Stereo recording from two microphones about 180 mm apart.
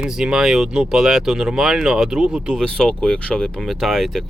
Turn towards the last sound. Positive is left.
turn(degrees=0)  # may be behind; listen again after turning